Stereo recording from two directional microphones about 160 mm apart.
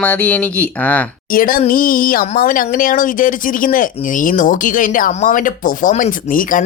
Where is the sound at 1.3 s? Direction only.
65° left (ahead or behind).